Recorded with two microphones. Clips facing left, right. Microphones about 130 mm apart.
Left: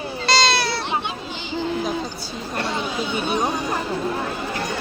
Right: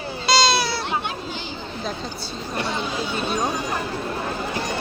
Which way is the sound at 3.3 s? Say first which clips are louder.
Left 2 dB; 15° left (ahead or behind).